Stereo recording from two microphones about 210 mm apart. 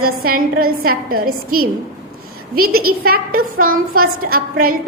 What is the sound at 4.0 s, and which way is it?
Speech, 45° right (ahead or behind).